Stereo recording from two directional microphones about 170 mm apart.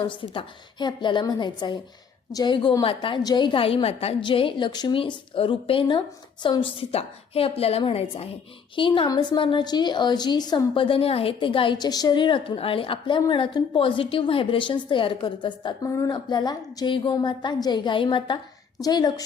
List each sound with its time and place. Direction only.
0.0 s a woman's voice: 30° left (ahead or behind)